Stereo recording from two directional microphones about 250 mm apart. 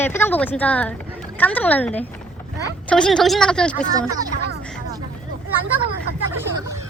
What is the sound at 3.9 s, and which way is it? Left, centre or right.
Speech, centre.